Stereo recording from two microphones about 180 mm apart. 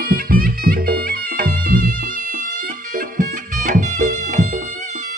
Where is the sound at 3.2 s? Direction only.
45° right (ahead or behind).